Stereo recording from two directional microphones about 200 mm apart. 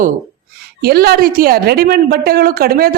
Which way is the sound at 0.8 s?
50° right (ahead or behind).